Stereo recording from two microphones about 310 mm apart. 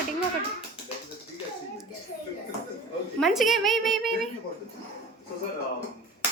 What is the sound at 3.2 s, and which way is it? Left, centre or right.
A woman's voice, centre.